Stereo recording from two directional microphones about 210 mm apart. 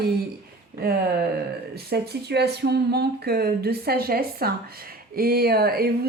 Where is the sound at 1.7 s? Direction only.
50° right (ahead or behind).